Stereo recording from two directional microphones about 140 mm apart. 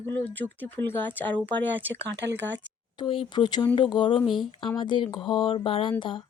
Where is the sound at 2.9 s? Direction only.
40° left (ahead or behind).